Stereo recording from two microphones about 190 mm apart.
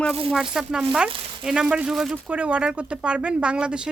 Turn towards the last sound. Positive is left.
turn(degrees=-5)  # may be behind; listen again after turning